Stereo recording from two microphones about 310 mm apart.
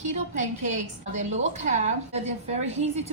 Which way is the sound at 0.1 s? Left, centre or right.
Right.